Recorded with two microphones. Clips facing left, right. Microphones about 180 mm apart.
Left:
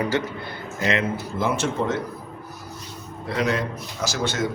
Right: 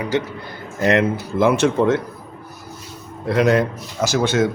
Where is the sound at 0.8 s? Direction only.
65° right (ahead or behind).